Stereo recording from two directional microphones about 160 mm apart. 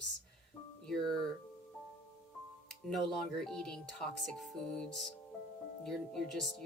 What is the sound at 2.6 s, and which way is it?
Speech, centre (ahead or behind).